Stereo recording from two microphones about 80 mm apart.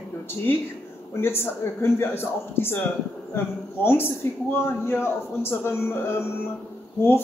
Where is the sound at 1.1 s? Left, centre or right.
Left.